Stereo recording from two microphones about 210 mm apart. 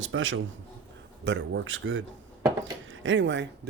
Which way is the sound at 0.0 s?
65° right (ahead or behind).